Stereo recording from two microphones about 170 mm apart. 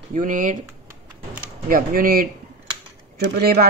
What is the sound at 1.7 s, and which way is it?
Speech, 55° right (ahead or behind).